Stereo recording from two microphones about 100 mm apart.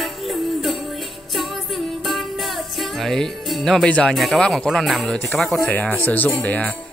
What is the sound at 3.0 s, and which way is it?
Speech, 5° left (ahead or behind).